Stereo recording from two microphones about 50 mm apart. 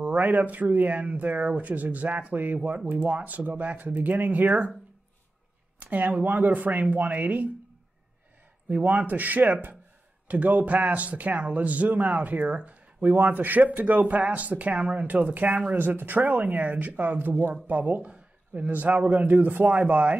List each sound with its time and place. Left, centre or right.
0.0 s speech: right
5.8 s speech: right
8.6 s speech: right
13.0 s speech: right
18.0 s a sound: right
18.7 s speech: right
19.6 s speech: right